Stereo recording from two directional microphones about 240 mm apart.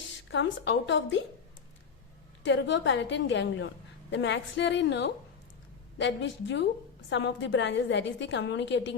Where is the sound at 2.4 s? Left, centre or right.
Left.